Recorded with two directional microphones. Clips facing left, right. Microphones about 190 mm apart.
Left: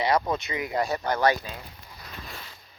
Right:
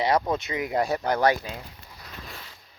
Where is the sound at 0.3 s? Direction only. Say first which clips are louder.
Right 2 dB; 45° right (ahead or behind).